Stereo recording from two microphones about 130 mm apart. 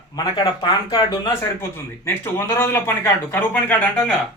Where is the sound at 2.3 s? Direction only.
20° left (ahead or behind).